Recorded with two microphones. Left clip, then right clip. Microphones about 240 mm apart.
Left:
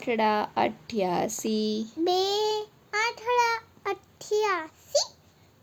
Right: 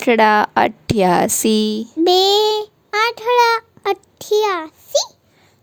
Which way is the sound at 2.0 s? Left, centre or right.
Right.